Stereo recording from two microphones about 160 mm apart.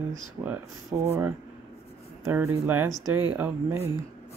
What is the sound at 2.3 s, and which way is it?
Speech, 15° right (ahead or behind).